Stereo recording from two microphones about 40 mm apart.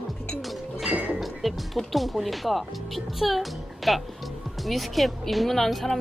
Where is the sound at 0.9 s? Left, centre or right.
Right.